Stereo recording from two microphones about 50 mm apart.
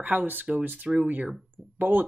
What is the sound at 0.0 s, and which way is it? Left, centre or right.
Speech, right.